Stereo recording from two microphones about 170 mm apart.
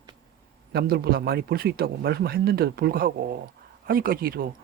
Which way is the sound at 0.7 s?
65° right (ahead or behind).